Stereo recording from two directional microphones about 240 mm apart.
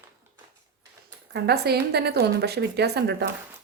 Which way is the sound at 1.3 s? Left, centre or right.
Right.